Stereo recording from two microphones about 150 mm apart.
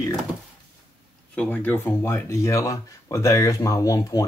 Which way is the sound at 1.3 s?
10° left (ahead or behind).